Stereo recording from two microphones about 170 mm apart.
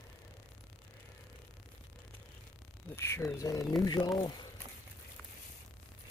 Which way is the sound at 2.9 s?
15° left (ahead or behind).